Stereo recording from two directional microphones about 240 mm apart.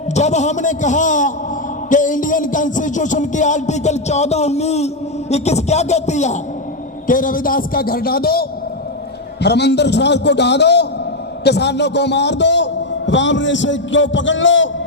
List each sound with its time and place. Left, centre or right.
0.1 s music: left
5.3 s a man's voice: left
7.1 s music: left
9.4 s a man's voice: left